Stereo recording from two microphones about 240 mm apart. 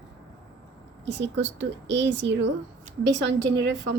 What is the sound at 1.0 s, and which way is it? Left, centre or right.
A woman's voice, right.